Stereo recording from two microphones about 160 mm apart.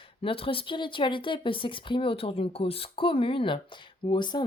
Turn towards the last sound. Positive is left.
turn(degrees=30)  # may be behind; listen again after turning